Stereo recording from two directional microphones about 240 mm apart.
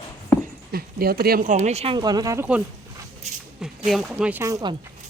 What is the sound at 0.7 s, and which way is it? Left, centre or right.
Speech, right.